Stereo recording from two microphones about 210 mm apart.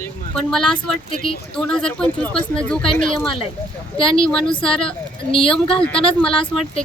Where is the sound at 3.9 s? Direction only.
25° left (ahead or behind).